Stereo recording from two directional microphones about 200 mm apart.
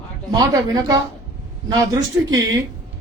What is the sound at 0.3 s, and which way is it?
A man's voice, 20° right (ahead or behind).